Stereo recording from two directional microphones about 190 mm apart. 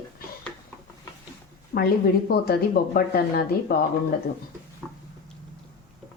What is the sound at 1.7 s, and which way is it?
A woman's voice, 50° left (ahead or behind).